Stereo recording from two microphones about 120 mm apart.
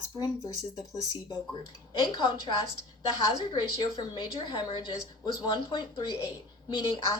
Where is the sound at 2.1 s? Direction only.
40° left (ahead or behind).